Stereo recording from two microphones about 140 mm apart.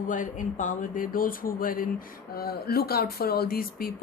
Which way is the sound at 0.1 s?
70° left (ahead or behind).